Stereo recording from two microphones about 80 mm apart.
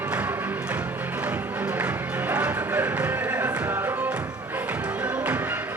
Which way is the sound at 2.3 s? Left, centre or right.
Centre.